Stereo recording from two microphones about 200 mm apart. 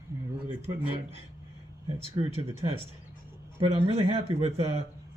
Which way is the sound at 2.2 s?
25° right (ahead or behind).